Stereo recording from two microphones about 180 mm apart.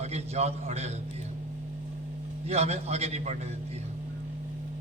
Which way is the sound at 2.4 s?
35° right (ahead or behind).